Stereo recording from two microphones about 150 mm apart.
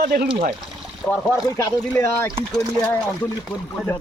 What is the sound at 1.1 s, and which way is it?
Speech, centre (ahead or behind).